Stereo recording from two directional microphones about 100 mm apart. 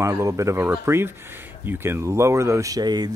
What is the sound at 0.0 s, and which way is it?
Speech, 30° right (ahead or behind).